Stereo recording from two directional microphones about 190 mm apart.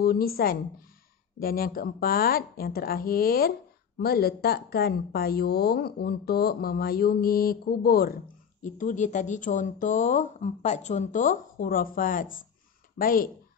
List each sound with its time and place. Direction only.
0.0 s speech: 50° left (ahead or behind)
8.6 s speech: 40° left (ahead or behind)